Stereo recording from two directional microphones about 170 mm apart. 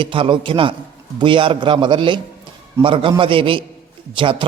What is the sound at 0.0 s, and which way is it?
A man's voice, 30° right (ahead or behind).